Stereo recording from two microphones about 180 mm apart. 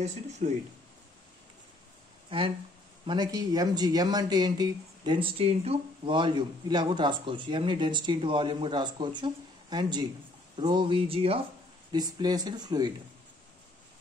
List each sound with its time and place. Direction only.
0.4 s speech: 45° right (ahead or behind)
2.2 s speech: 30° right (ahead or behind)